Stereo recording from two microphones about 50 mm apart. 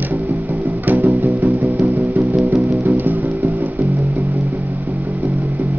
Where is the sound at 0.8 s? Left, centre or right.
Right.